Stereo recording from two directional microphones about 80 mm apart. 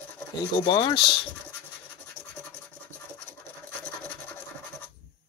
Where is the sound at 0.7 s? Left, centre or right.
Left.